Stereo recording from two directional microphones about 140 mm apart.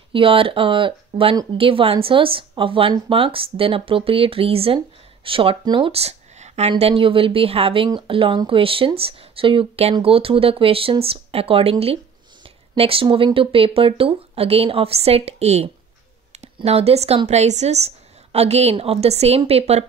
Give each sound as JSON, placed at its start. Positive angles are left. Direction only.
{"t": 0.1, "sound": "a woman's voice", "side_deg": -40}
{"t": 12.7, "sound": "speech", "side_deg": -40}